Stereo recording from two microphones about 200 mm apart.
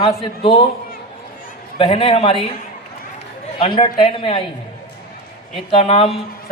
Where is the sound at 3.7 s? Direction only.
25° left (ahead or behind).